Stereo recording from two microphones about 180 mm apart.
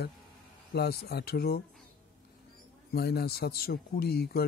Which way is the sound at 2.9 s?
60° left (ahead or behind).